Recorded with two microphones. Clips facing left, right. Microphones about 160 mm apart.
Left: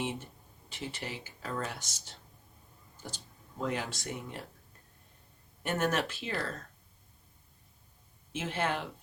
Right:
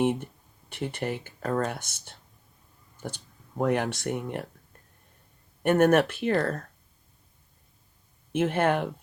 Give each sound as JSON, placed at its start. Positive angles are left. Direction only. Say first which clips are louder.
{"t": 0.0, "sound": "speech", "louder": "right 11 dB", "side_deg": -55}
{"t": 5.6, "sound": "speech", "louder": "right 11 dB", "side_deg": -55}
{"t": 8.3, "sound": "speech", "louder": "right 9 dB", "side_deg": -55}